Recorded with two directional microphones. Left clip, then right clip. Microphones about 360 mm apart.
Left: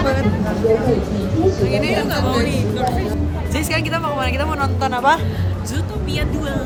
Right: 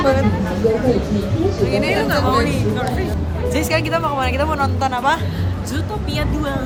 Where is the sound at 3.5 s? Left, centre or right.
Centre.